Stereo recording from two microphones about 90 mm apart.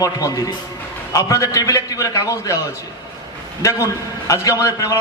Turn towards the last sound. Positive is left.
turn(degrees=35)  # may be behind; listen again after turning